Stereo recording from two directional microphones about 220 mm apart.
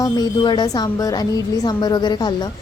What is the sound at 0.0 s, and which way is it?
Speech, 20° left (ahead or behind).